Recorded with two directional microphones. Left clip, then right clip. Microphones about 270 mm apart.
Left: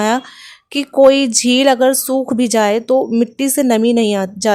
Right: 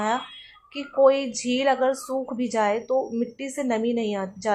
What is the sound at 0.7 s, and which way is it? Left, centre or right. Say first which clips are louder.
Speech: left 9 dB; left.